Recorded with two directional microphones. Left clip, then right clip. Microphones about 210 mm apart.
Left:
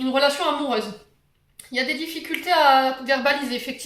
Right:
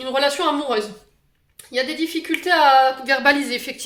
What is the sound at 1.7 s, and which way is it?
A woman's voice, 50° right (ahead or behind).